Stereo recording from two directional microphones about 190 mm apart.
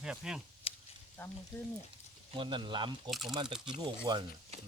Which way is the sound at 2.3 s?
25° right (ahead or behind).